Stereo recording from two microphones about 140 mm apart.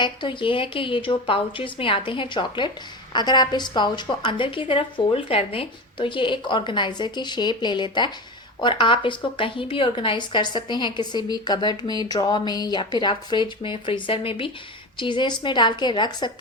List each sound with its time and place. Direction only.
0.0 s a woman's voice: 35° left (ahead or behind)